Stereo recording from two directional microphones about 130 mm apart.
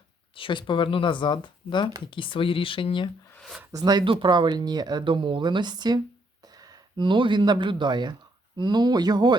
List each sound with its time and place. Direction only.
0.3 s speech: 40° left (ahead or behind)
3.7 s speech: 30° right (ahead or behind)